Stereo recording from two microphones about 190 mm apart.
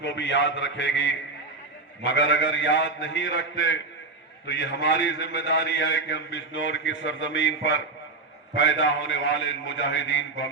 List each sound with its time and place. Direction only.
0.0 s a man's voice: 70° left (ahead or behind)